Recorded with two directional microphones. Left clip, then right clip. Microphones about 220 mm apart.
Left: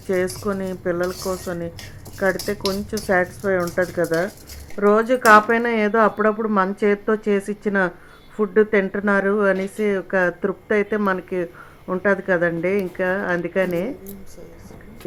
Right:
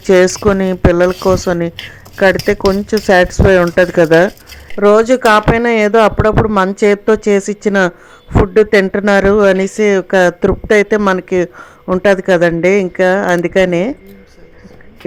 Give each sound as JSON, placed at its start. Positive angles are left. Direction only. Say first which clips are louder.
{"t": 0.1, "sound": "speech", "louder": "right 13 dB", "side_deg": -45}